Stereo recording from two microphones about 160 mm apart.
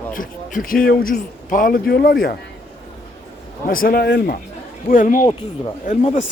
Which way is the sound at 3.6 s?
65° left (ahead or behind).